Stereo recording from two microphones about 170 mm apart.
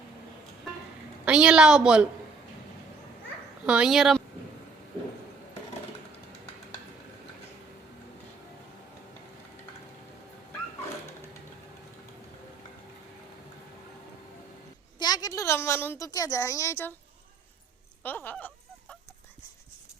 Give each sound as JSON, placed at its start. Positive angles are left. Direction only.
{"t": 1.2, "sound": "a woman's voice", "side_deg": -5}
{"t": 3.7, "sound": "a woman's voice", "side_deg": -5}
{"t": 14.9, "sound": "a sound", "side_deg": 25}
{"t": 18.0, "sound": "fowl", "side_deg": 10}